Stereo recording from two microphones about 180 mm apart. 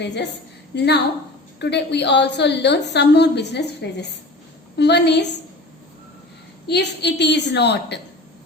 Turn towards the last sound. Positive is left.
turn(degrees=70)  # may be behind; listen again after turning